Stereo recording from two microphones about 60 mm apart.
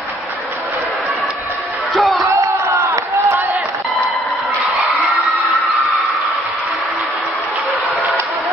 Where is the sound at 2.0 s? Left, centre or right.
Centre.